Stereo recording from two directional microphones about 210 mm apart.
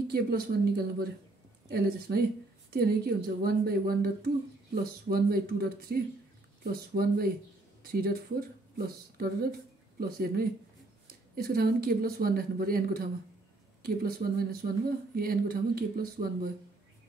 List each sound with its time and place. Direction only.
0.1 s a woman's voice: 45° right (ahead or behind)